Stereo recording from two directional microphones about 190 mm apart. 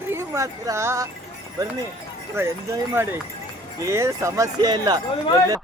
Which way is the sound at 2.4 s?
10° right (ahead or behind).